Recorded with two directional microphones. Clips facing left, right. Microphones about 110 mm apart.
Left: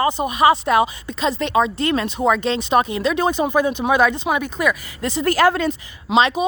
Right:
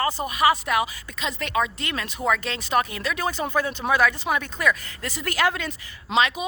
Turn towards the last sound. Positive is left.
turn(degrees=30)  # may be behind; listen again after turning